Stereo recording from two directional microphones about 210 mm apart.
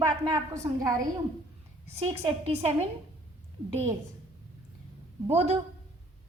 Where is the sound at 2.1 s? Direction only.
30° right (ahead or behind).